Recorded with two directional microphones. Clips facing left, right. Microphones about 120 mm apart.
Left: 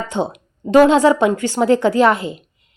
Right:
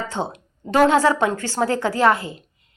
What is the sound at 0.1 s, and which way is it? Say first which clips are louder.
A woman's voice: left 5 dB; 15° left (ahead or behind).